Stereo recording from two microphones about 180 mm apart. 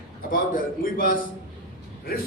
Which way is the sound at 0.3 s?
50° left (ahead or behind).